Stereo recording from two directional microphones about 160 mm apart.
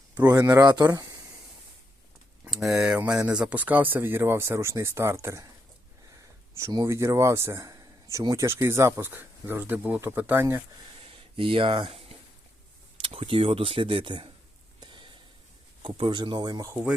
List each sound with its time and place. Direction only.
0.2 s speech: 25° right (ahead or behind)
2.5 s speech: centre (ahead or behind)
6.5 s speech: 20° right (ahead or behind)
11.0 s a sound: 30° right (ahead or behind)
13.0 s speech: 35° right (ahead or behind)
14.8 s a sound: 30° right (ahead or behind)
15.8 s speech: 30° right (ahead or behind)